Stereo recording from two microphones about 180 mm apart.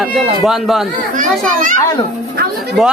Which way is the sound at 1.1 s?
50° right (ahead or behind).